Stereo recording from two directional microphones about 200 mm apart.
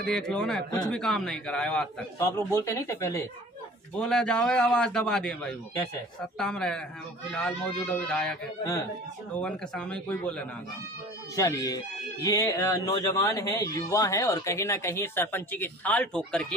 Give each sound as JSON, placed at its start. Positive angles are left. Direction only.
{"t": 0.0, "sound": "a man's voice", "side_deg": 5}
{"t": 2.1, "sound": "speech", "side_deg": 15}
{"t": 4.0, "sound": "a man's voice", "side_deg": 5}
{"t": 9.4, "sound": "a man's voice", "side_deg": 5}
{"t": 11.3, "sound": "speech", "side_deg": 15}